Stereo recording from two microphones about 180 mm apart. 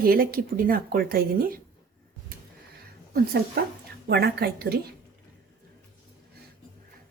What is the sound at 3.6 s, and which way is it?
A woman's voice, 60° right (ahead or behind).